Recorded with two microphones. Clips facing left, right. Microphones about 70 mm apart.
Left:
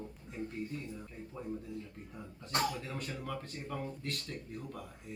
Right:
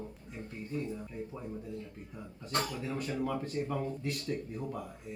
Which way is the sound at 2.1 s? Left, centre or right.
Centre.